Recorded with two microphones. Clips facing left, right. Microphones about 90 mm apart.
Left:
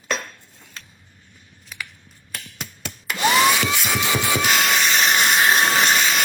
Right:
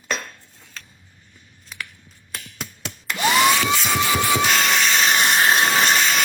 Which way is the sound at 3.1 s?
Centre (ahead or behind).